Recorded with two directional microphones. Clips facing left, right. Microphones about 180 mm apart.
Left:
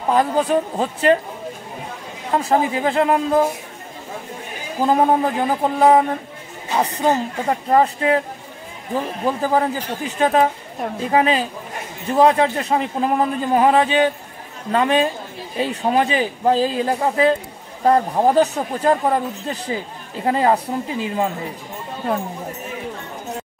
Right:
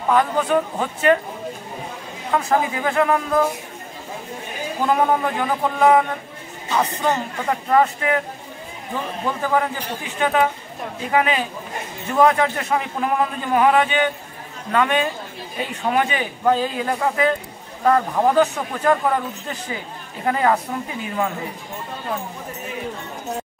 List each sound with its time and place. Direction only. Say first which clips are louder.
0.1 s a man's voice: left 1 dB; 35° left (ahead or behind)
2.3 s speech: left 2 dB; 30° left (ahead or behind)
4.8 s a man's voice: left 3 dB; 30° left (ahead or behind)
9.2 s a man's voice: left 2 dB; 35° left (ahead or behind)